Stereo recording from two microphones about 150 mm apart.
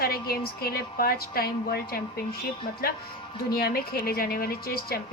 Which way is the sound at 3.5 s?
90° left.